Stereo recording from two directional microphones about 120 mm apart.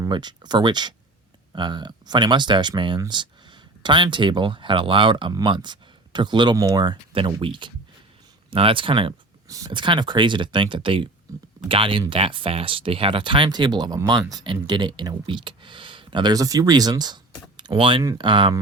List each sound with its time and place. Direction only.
0.0 s speech: 40° right (ahead or behind)
9.5 s speech: 30° right (ahead or behind)
18.0 s speech: 35° right (ahead or behind)